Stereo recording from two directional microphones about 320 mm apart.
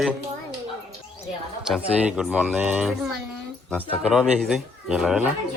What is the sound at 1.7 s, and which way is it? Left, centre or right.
Speech, centre.